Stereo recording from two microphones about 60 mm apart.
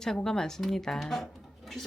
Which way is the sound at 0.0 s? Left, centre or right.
Centre.